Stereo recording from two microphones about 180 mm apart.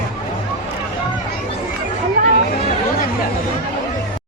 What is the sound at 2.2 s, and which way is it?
Chatter, 45° right (ahead or behind).